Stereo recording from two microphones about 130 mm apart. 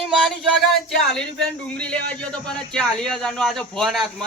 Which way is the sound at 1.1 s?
5° left (ahead or behind).